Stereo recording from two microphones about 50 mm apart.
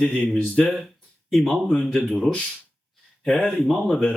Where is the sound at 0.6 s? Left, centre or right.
Centre.